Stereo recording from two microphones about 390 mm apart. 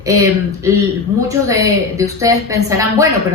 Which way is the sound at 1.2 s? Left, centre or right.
Centre.